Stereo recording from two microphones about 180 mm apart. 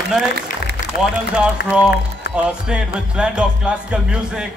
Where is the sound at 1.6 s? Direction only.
55° left (ahead or behind).